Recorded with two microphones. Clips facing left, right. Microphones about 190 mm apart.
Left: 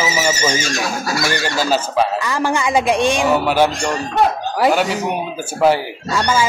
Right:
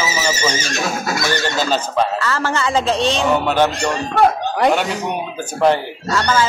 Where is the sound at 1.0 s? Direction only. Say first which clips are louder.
Left 1 dB; 20° right (ahead or behind).